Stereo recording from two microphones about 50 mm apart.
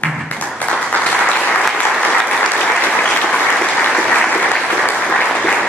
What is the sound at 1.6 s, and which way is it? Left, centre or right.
Applause, centre.